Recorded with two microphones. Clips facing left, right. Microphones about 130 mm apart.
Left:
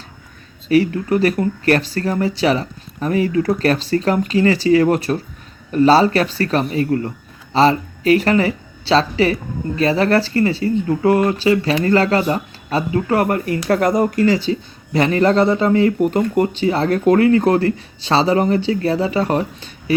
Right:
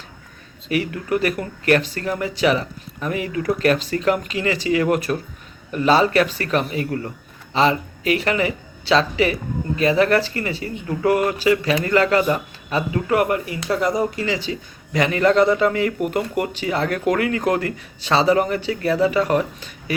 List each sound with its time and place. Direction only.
0.7 s speech: 30° left (ahead or behind)